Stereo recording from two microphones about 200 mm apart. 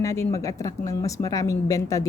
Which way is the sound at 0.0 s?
15° left (ahead or behind).